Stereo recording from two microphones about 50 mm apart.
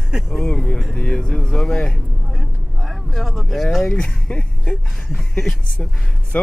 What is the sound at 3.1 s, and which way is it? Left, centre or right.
Speech, centre.